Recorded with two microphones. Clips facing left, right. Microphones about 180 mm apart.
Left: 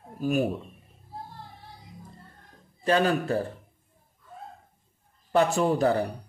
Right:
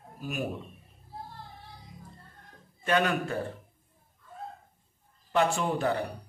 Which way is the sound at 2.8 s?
35° left (ahead or behind).